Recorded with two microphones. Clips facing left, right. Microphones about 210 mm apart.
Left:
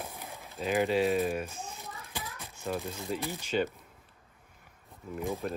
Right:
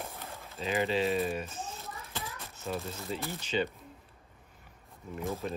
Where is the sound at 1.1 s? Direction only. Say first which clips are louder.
Left 2 dB; 5° left (ahead or behind).